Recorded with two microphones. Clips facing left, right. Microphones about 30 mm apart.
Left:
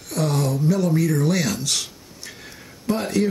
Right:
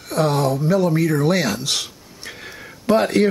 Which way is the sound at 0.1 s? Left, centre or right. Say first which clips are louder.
Right 4 dB; centre.